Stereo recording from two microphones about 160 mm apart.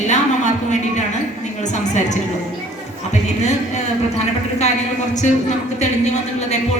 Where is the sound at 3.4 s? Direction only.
45° left (ahead or behind).